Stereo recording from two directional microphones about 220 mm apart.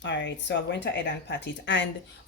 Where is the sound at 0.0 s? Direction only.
55° left (ahead or behind).